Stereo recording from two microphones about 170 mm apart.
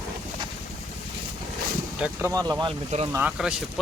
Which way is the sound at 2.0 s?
15° right (ahead or behind).